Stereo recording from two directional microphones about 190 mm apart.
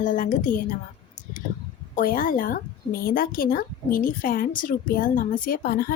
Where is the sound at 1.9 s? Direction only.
50° left (ahead or behind).